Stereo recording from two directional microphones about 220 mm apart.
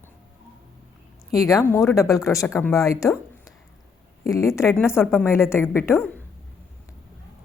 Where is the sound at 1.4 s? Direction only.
15° left (ahead or behind).